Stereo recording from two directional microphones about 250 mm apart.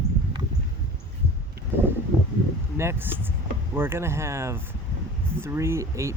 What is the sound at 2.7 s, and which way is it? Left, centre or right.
Speech, centre.